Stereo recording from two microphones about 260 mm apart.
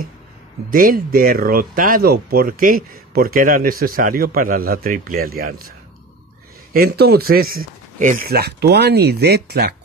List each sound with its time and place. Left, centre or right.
0.7 s speech: right
6.7 s speech: right